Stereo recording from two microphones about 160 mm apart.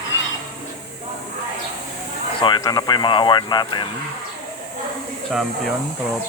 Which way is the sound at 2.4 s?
30° left (ahead or behind).